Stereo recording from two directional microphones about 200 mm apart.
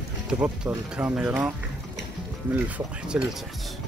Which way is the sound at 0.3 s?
5° right (ahead or behind).